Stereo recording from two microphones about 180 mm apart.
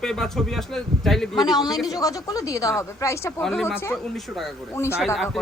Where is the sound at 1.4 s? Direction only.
20° left (ahead or behind).